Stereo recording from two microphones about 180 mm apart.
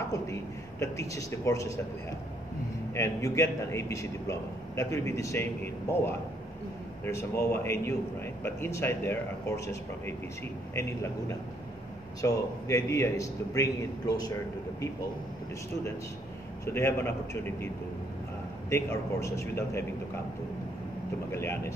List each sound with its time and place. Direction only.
0.1 s a man's voice: 15° left (ahead or behind)
2.9 s a man's voice: 15° left (ahead or behind)
16.6 s a man's voice: 15° left (ahead or behind)
18.7 s a man's voice: 15° left (ahead or behind)
21.3 s a man's voice: 15° left (ahead or behind)